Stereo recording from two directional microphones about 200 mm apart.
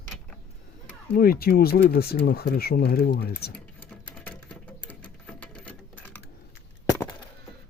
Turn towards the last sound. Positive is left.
turn(degrees=5)  # may be behind; listen again after turning